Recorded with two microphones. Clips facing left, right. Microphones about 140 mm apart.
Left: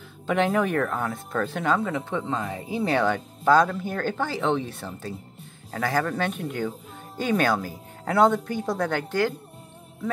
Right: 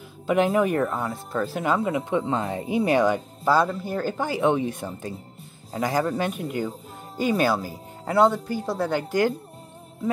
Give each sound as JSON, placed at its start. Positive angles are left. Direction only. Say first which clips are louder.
{"t": 0.3, "sound": "speech", "louder": "right 2 dB", "side_deg": -10}